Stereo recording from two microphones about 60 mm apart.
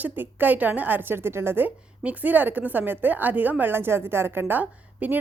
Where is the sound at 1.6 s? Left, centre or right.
Right.